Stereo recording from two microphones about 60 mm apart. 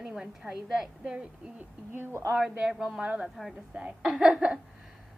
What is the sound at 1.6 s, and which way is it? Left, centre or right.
Speech, right.